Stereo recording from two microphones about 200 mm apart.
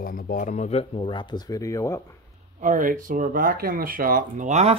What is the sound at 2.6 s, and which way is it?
Speech, 40° right (ahead or behind).